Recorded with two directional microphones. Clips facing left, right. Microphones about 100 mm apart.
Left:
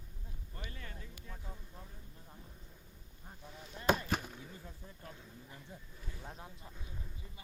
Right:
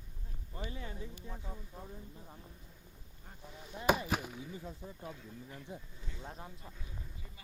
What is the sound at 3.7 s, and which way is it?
Chop, 15° right (ahead or behind).